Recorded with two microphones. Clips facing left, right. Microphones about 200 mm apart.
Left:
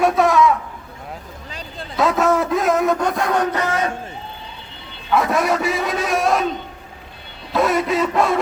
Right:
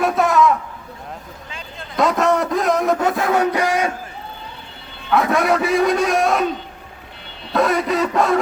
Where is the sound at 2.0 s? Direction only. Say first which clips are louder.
Even; centre (ahead or behind).